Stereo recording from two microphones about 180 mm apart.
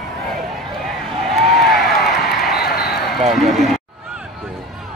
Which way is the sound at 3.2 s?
Centre (ahead or behind).